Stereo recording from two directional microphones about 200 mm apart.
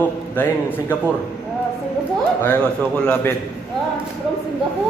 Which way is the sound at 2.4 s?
5° left (ahead or behind).